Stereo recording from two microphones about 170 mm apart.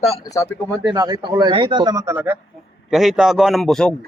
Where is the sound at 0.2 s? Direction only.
20° left (ahead or behind).